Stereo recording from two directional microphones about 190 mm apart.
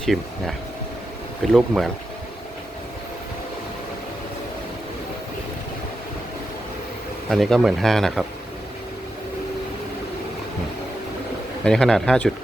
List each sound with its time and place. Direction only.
0.0 s speech: centre (ahead or behind)
1.5 s speech: centre (ahead or behind)
7.3 s speech: centre (ahead or behind)
11.6 s speech: 5° left (ahead or behind)